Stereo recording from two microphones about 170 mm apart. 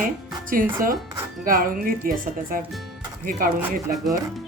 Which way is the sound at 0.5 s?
55° right (ahead or behind).